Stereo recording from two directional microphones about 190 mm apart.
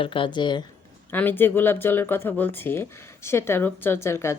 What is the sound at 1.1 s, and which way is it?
Speech, 10° left (ahead or behind).